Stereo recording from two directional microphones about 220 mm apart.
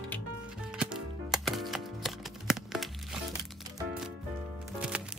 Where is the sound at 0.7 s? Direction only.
Centre (ahead or behind).